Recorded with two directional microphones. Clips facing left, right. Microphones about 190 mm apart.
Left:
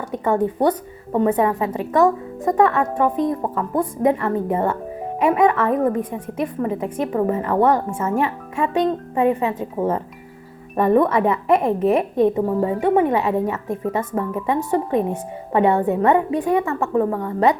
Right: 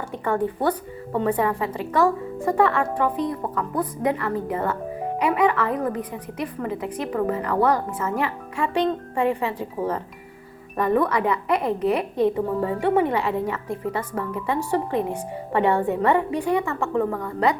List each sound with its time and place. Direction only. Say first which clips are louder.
0.1 s a woman's voice: left 5 dB; 20° left (ahead or behind)
10.8 s a woman's voice: left 5 dB; 25° left (ahead or behind)